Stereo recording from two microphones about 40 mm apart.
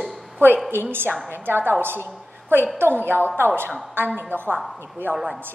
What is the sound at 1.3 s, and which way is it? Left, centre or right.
A woman's voice, right.